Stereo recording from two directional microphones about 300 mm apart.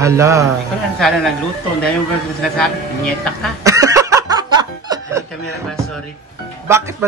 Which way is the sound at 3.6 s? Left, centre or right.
Centre.